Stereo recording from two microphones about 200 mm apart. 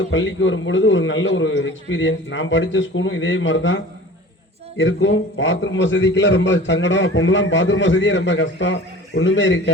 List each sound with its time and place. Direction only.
0.1 s a man's voice: 70° left (ahead or behind)
4.8 s a man's voice: 70° left (ahead or behind)